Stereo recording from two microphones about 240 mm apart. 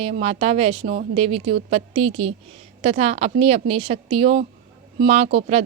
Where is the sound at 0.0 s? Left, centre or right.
Right.